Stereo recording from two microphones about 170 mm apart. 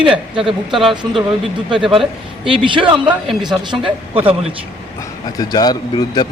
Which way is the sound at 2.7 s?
30° right (ahead or behind).